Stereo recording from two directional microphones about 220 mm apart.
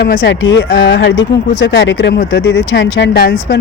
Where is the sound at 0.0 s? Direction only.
50° left (ahead or behind).